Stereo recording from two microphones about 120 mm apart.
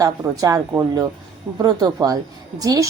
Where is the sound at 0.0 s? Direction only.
30° right (ahead or behind).